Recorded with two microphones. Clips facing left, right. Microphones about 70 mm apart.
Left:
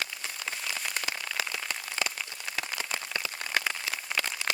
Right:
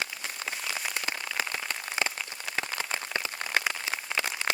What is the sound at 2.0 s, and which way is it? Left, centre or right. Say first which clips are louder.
Rain on surface: right 3 dB; centre.